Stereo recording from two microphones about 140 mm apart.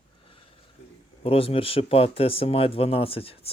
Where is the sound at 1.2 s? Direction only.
45° left (ahead or behind).